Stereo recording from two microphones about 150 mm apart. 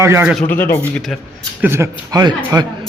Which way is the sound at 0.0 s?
20° right (ahead or behind).